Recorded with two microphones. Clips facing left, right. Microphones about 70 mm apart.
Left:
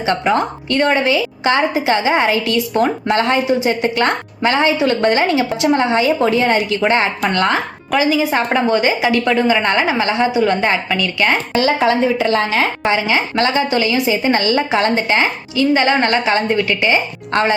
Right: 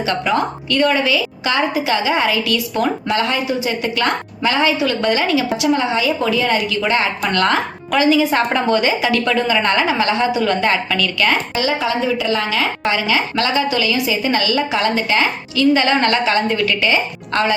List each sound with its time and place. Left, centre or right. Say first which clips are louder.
0.0 s a woman's voice: left 2 dB; left
11.5 s a woman's voice: left 4 dB; left
12.8 s a woman's voice: left 2 dB; left